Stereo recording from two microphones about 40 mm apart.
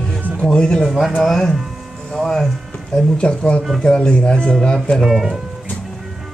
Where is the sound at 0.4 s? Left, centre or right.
Left.